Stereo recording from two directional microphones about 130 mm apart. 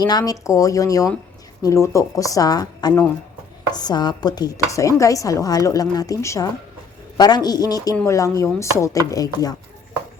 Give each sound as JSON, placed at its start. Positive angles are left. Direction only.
{"t": 0.0, "sound": "dishes", "side_deg": 30}
{"t": 7.2, "sound": "speech", "side_deg": 30}
{"t": 8.0, "sound": "dishes", "side_deg": 25}